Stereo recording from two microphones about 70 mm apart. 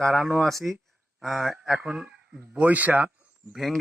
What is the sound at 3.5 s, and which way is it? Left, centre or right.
Speech, centre.